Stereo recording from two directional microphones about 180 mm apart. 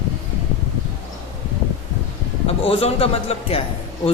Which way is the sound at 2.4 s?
35° left (ahead or behind).